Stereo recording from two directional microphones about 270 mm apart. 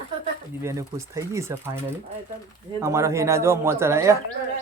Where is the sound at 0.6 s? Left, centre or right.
Centre.